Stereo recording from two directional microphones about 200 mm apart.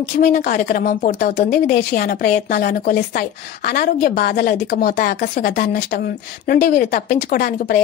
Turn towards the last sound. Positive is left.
turn(degrees=50)  # may be behind; listen again after turning